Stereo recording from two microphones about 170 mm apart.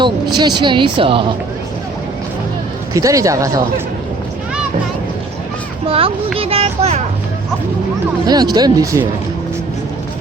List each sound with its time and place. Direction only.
0.3 s a woman's voice: 25° right (ahead or behind)
2.9 s a woman's voice: 20° right (ahead or behind)
5.9 s a child's voice: 35° right (ahead or behind)
8.3 s a woman's voice: 25° right (ahead or behind)